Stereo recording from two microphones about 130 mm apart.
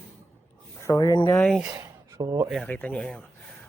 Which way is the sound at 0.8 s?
25° left (ahead or behind).